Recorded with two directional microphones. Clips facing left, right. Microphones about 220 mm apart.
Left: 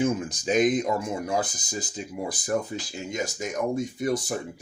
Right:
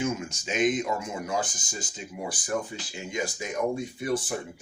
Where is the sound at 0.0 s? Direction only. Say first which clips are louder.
Left 5 dB; 35° left (ahead or behind).